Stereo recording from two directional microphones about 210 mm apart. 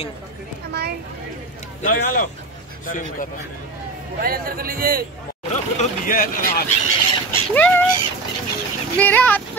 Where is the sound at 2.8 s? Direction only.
40° left (ahead or behind).